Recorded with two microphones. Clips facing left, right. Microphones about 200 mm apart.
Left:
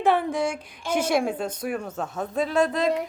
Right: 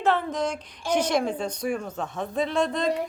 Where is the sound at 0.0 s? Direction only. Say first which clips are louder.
Left 2 dB; 10° left (ahead or behind).